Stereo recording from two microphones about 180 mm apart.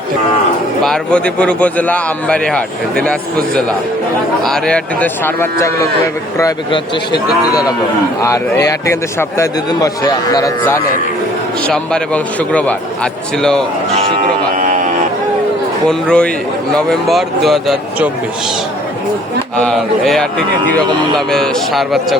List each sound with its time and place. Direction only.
0.8 s a man's voice: 5° left (ahead or behind)
4.4 s a man's voice: centre (ahead or behind)
6.7 s a man's voice: 25° left (ahead or behind); by 13.6 s 5° left (ahead or behind)
14.6 s a sound: 45° right (ahead or behind)
15.9 s a man's voice: 5° left (ahead or behind)
19.5 s a man's voice: centre (ahead or behind)